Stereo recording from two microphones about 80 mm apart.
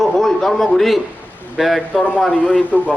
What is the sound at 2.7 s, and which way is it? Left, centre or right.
Speech, centre.